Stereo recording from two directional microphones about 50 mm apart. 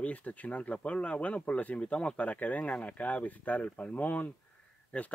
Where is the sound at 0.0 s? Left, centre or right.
Left.